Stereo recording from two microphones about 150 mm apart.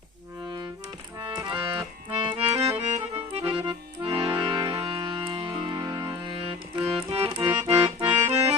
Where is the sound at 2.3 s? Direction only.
20° right (ahead or behind).